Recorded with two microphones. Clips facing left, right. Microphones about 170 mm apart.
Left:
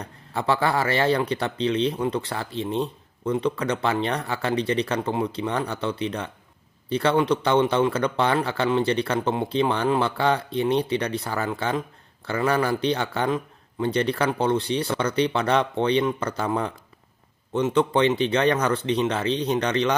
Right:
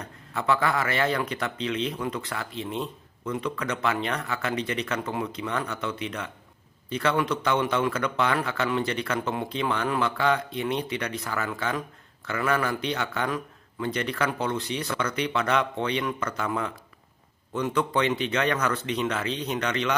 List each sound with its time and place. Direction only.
0.0 s speech: 30° left (ahead or behind)